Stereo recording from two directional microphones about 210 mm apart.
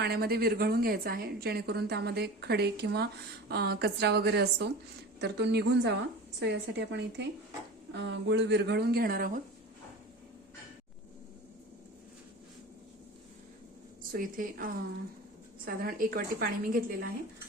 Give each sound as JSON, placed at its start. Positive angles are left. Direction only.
{"t": 0.0, "sound": "a woman's voice", "side_deg": -50}
{"t": 14.1, "sound": "a woman's voice", "side_deg": -45}